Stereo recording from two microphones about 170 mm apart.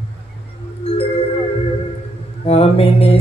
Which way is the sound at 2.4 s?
35° left (ahead or behind).